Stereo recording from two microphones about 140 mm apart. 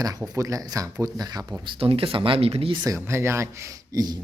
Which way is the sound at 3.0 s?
20° right (ahead or behind).